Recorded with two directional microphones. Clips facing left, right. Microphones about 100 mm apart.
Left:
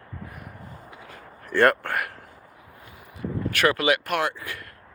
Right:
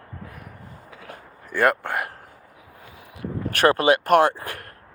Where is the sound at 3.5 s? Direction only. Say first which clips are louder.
Right 5 dB; 35° right (ahead or behind).